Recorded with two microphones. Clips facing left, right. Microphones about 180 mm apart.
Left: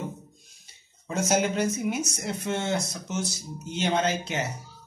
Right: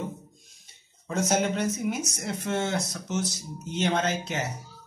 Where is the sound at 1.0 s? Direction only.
5° left (ahead or behind).